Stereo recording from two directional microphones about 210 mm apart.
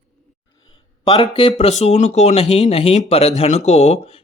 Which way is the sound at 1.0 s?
25° left (ahead or behind).